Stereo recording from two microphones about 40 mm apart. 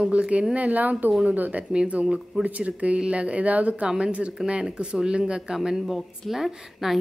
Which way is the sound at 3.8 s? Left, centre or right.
Right.